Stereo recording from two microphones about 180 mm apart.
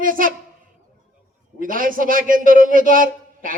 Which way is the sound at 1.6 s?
50° right (ahead or behind).